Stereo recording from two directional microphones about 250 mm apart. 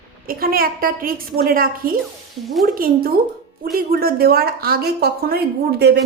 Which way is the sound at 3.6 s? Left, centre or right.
Right.